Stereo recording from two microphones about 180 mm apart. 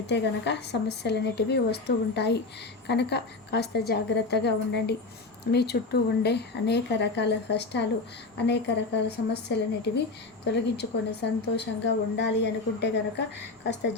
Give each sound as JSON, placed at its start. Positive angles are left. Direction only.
{"t": 0.1, "sound": "speech", "side_deg": 70}